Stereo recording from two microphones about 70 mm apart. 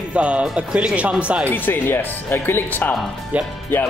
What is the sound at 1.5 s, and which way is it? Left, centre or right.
Speech, left.